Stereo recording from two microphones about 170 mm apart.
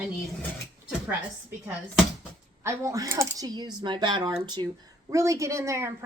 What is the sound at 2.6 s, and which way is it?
A woman's voice, 15° right (ahead or behind).